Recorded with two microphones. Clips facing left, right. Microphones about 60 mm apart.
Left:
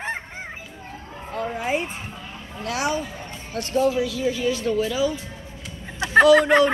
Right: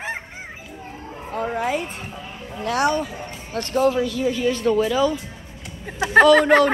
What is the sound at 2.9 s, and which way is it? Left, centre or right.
Music, centre.